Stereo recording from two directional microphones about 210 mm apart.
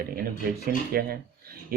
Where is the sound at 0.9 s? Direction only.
45° right (ahead or behind).